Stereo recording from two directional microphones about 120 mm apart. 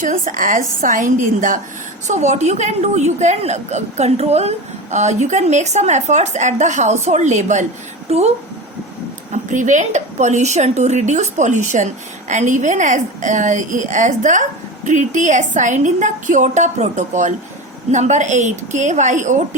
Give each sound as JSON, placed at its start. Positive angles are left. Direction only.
{"t": 0.0, "sound": "a woman's voice", "side_deg": -90}
{"t": 2.0, "sound": "a woman's voice", "side_deg": -75}
{"t": 8.1, "sound": "speech", "side_deg": -60}
{"t": 9.3, "sound": "a woman's voice", "side_deg": -90}